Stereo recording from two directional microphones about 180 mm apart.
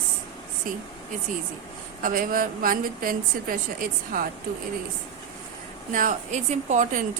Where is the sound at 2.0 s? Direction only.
50° right (ahead or behind).